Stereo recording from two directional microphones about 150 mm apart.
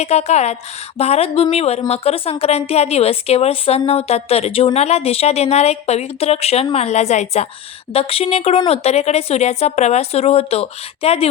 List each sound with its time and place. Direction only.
0.0 s a woman's voice: 45° left (ahead or behind)